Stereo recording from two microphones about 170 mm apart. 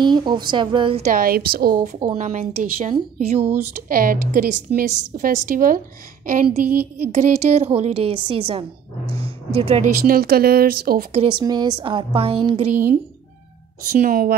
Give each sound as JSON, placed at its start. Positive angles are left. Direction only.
{"t": 0.0, "sound": "a woman's voice", "side_deg": -25}
{"t": 1.0, "sound": "a woman's voice", "side_deg": -60}
{"t": 2.9, "sound": "a woman's voice", "side_deg": -35}
{"t": 3.9, "sound": "a woman's voice", "side_deg": -55}
{"t": 9.1, "sound": "a sound", "side_deg": -35}
{"t": 10.0, "sound": "a woman's voice", "side_deg": -60}
{"t": 11.1, "sound": "a woman's voice", "side_deg": -30}
{"t": 13.8, "sound": "a woman's voice", "side_deg": -55}